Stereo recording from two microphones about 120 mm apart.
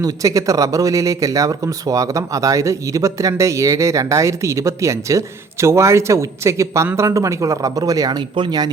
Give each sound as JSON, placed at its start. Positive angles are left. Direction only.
{"t": 0.0, "sound": "speech", "side_deg": -30}